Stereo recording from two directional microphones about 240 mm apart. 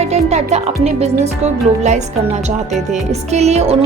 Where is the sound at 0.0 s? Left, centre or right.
Right.